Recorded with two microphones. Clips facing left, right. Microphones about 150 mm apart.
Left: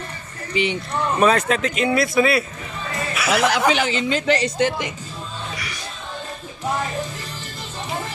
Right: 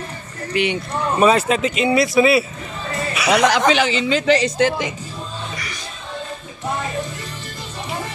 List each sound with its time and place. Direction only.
0.5 s speech: 65° right (ahead or behind)
1.2 s speech: 10° right (ahead or behind)
3.7 s a woman's voice: 90° right